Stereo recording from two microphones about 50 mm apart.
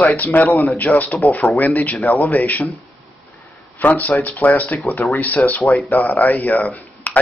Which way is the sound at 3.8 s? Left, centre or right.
Left.